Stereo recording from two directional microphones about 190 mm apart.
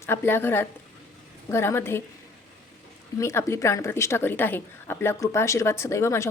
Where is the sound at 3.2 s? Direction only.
15° left (ahead or behind).